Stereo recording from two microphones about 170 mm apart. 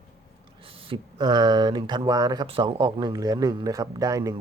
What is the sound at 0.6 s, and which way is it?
Speech, 35° right (ahead or behind).